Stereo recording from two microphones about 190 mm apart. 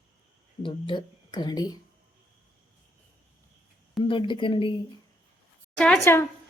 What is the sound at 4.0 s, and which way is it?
Speech, 25° left (ahead or behind).